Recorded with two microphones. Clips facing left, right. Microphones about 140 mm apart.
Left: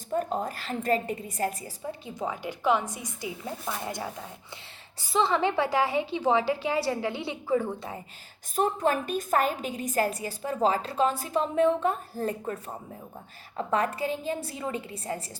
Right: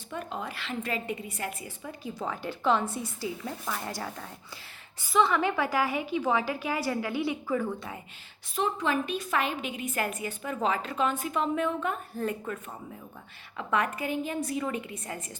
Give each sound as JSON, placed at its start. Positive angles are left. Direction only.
{"t": 0.1, "sound": "a woman's voice", "side_deg": 40}
{"t": 4.9, "sound": "a woman's voice", "side_deg": 30}
{"t": 8.5, "sound": "a woman's voice", "side_deg": 45}